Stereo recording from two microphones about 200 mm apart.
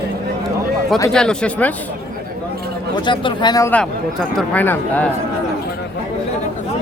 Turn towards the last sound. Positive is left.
turn(degrees=10)  # may be behind; listen again after turning